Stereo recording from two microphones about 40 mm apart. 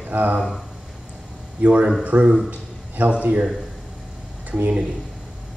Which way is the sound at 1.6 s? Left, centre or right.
Right.